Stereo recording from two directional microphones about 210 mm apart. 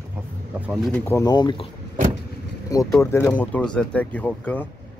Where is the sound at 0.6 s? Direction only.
Centre (ahead or behind); by 1.6 s 20° left (ahead or behind).